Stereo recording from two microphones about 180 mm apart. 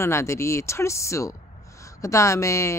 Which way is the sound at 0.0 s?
15° left (ahead or behind).